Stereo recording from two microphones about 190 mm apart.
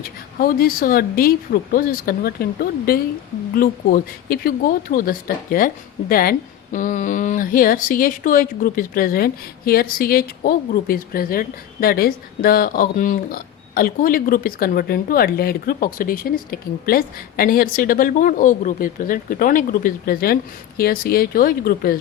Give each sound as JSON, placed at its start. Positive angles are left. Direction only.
{"t": 0.3, "sound": "speech", "side_deg": 50}